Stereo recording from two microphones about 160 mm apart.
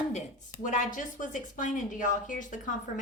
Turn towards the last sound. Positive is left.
turn(degrees=50)  # may be behind; listen again after turning